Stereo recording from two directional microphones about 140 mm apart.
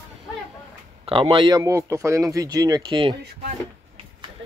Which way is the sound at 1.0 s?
40° right (ahead or behind).